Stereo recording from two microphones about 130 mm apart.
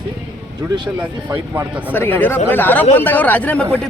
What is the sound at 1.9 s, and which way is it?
Speech, 15° left (ahead or behind).